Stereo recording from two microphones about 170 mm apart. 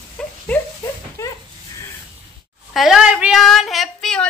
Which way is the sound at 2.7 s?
Centre (ahead or behind).